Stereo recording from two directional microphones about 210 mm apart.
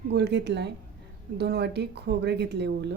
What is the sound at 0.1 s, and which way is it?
Speech, 55° right (ahead or behind).